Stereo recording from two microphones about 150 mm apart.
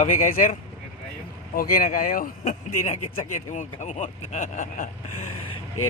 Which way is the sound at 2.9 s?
55° left (ahead or behind).